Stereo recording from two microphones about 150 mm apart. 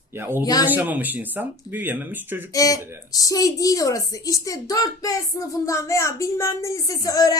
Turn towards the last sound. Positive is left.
turn(degrees=25)  # may be behind; listen again after turning